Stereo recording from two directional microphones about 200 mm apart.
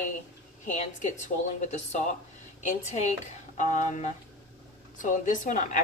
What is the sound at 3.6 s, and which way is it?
A woman's voice, 40° left (ahead or behind).